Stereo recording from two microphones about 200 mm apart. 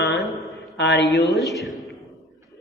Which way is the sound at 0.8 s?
60° left (ahead or behind).